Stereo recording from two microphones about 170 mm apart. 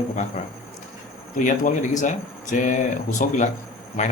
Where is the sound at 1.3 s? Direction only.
50° left (ahead or behind).